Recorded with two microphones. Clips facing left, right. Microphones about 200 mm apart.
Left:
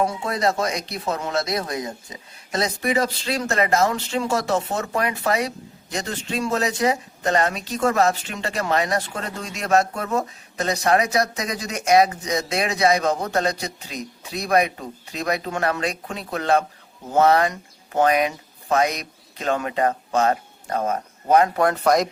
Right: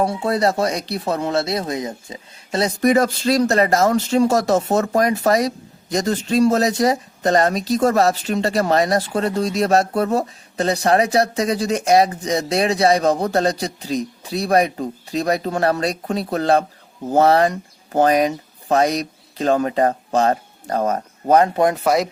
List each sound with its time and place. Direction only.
0.0 s speech: 35° right (ahead or behind)
2.8 s speech: 45° right (ahead or behind)
21.5 s speech: 20° right (ahead or behind)
21.8 s speech: 5° right (ahead or behind)